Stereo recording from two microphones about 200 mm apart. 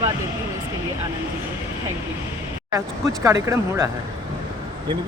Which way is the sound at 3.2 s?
15° right (ahead or behind).